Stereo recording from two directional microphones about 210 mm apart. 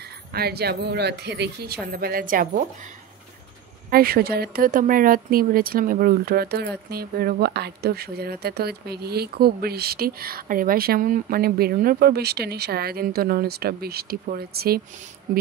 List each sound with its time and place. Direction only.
0.3 s speech: 50° right (ahead or behind)
3.9 s speech: 45° right (ahead or behind)